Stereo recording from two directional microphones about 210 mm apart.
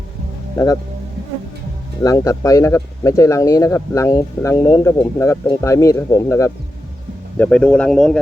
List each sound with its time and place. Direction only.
0.5 s speech: 20° left (ahead or behind)
2.0 s speech: 15° left (ahead or behind)